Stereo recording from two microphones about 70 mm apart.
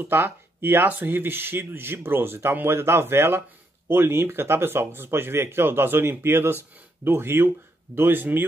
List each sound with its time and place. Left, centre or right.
0.0 s speech: right